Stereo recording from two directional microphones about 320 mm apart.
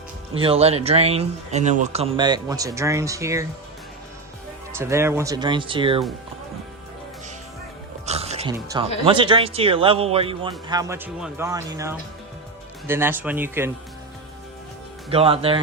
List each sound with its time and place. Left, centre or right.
0.3 s speech: centre
4.7 s speech: centre
8.0 s music: centre
9.0 s speech: centre
15.1 s speech: centre